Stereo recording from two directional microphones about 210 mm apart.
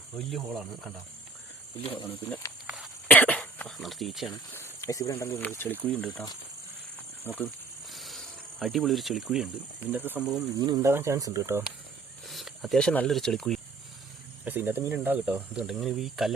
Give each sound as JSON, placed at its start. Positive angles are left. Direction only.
{"t": 0.3, "sound": "speech", "side_deg": 0}
{"t": 1.8, "sound": "speech", "side_deg": 25}
{"t": 2.0, "sound": "speech", "side_deg": 10}
{"t": 2.6, "sound": "a sound", "side_deg": 0}
{"t": 4.5, "sound": "speech", "side_deg": 15}
{"t": 7.3, "sound": "cricket", "side_deg": 5}
{"t": 9.9, "sound": "speech", "side_deg": -10}
{"t": 10.3, "sound": "speech", "side_deg": -20}
{"t": 12.3, "sound": "speech", "side_deg": 0}
{"t": 14.4, "sound": "speech", "side_deg": -10}